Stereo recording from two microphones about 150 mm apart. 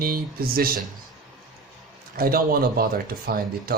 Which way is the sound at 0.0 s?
75° right (ahead or behind).